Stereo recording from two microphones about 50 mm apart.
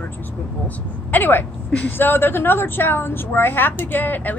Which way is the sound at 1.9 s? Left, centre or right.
Left.